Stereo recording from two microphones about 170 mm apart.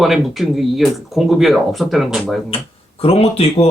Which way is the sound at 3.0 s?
35° left (ahead or behind).